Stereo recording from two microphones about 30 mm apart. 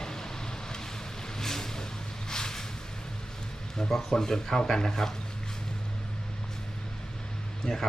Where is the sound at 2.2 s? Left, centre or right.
Left.